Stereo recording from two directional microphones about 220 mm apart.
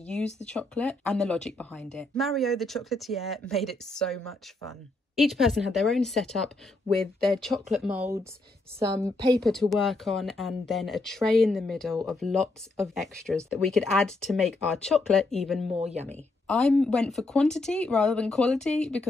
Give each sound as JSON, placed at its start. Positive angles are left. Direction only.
{"t": 0.0, "sound": "a woman's voice", "side_deg": 5}
{"t": 9.4, "sound": "a woman's voice", "side_deg": 0}
{"t": 15.7, "sound": "speech", "side_deg": -30}
{"t": 16.1, "sound": "a woman's voice", "side_deg": 5}